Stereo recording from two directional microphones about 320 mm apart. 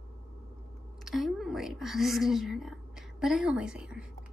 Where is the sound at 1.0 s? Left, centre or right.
Centre.